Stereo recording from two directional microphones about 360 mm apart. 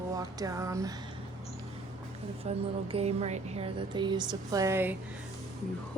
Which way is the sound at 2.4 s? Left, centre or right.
Centre.